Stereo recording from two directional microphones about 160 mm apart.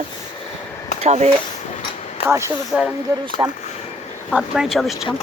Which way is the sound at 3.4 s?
25° right (ahead or behind).